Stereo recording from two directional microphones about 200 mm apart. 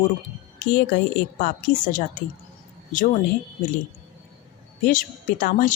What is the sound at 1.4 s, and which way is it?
Speech, 40° left (ahead or behind).